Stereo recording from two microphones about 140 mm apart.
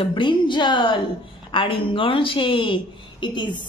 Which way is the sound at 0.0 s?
35° left (ahead or behind).